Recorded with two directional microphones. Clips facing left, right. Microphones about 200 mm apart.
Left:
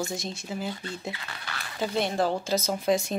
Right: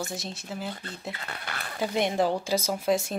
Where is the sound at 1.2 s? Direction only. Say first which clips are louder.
Right 2 dB; 50° right (ahead or behind).